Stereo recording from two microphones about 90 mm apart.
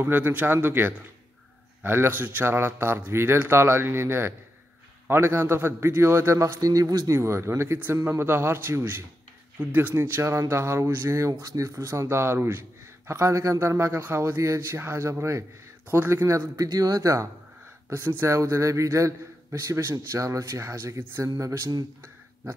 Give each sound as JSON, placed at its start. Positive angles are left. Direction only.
{"t": 0.0, "sound": "a man's voice", "side_deg": -20}
{"t": 16.3, "sound": "speech", "side_deg": -40}